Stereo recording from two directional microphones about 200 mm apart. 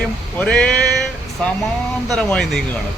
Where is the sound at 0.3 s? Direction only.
5° left (ahead or behind).